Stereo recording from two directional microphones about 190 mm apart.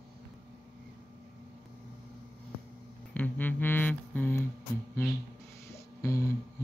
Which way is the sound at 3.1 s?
10° left (ahead or behind).